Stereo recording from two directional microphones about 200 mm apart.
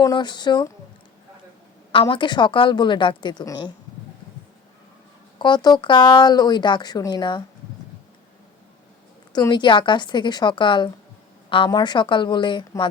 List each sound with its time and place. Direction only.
0.0 s speech: 20° left (ahead or behind)
1.9 s speech: 25° left (ahead or behind)
5.4 s speech: 20° left (ahead or behind)
9.3 s speech: 20° left (ahead or behind)